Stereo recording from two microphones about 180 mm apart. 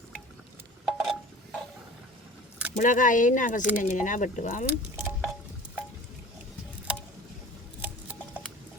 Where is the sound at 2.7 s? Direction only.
45° left (ahead or behind).